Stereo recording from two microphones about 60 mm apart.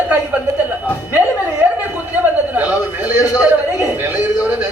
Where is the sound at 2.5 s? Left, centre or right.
Right.